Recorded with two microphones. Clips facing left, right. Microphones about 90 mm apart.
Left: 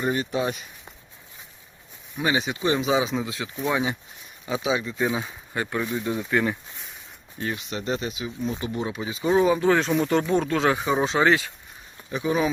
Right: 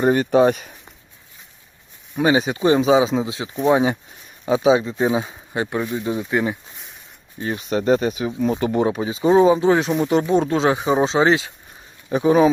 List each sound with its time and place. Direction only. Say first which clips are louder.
0.0 s speech: right 10 dB; 50° right (ahead or behind)
2.1 s speech: right 7 dB; 35° right (ahead or behind)
3.6 s speech: right 9 dB; 40° right (ahead or behind); by 6.6 s 15° right (ahead or behind)
7.4 s speech: right 9 dB; 40° right (ahead or behind)
8.3 s speech: right 9 dB; 60° right (ahead or behind)
8.9 s speech: right 4 dB; 35° right (ahead or behind); by 9.9 s 20° right (ahead or behind)
9.9 s speech: right 3 dB; 5° right (ahead or behind)
10.2 s speech: right 4 dB; 20° right (ahead or behind)
12.0 s speech: right 9 dB; 40° right (ahead or behind)